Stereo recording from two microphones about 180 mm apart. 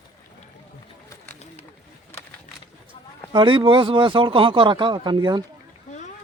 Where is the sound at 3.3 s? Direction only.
25° right (ahead or behind).